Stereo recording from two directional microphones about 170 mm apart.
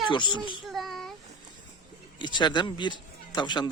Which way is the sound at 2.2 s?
25° left (ahead or behind).